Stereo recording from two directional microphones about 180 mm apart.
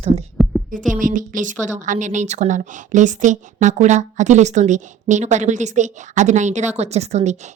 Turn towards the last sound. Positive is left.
turn(degrees=-40)  # may be behind; listen again after turning